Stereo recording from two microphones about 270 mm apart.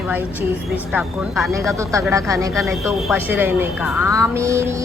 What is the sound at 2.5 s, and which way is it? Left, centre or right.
A woman's voice, centre.